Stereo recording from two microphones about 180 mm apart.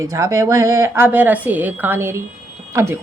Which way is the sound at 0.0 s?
20° right (ahead or behind).